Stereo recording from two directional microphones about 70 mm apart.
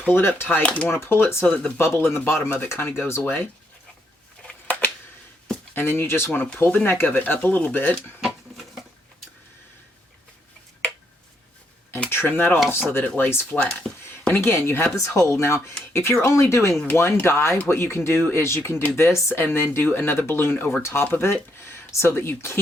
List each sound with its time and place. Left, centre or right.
0.1 s speech: left
0.6 s speech: centre
0.9 s speech: left
4.4 s a sound: left
5.7 s speech: left
8.2 s a sound: centre
12.1 s speech: left
13.6 s speech: centre
14.3 s speech: left
14.9 s speech: left